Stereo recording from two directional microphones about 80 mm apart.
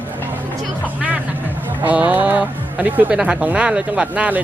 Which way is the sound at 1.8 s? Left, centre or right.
Right.